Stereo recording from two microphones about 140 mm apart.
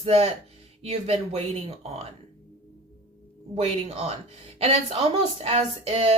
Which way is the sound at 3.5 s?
45° right (ahead or behind).